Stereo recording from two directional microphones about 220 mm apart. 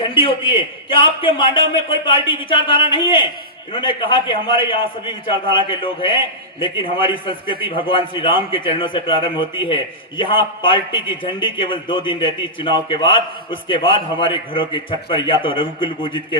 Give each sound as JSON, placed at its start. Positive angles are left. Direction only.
{"t": 0.0, "sound": "a man's voice", "side_deg": 25}